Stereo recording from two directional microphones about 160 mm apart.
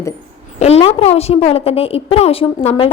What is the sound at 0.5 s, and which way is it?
A woman's voice, 40° left (ahead or behind).